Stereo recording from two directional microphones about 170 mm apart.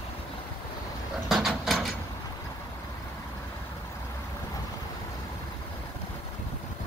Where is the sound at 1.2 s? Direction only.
Centre (ahead or behind).